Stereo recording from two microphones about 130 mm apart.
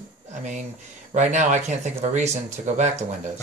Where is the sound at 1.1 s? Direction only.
65° right (ahead or behind).